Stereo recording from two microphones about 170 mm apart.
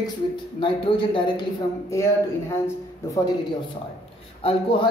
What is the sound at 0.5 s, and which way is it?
Speech, 30° left (ahead or behind).